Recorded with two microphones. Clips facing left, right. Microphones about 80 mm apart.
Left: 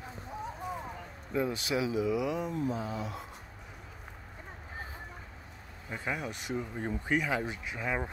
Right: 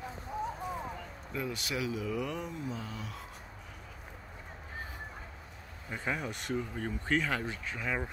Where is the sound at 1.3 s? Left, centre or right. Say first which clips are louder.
Left 6 dB; left; by 2.5 s centre.